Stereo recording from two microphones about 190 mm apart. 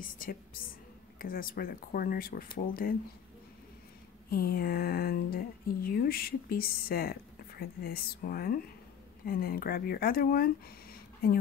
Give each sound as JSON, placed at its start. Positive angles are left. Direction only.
{"t": 0.0, "sound": "speech", "side_deg": 50}
{"t": 4.3, "sound": "speech", "side_deg": 50}